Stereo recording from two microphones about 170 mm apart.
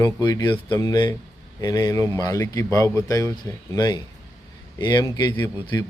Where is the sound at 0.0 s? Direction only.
20° left (ahead or behind).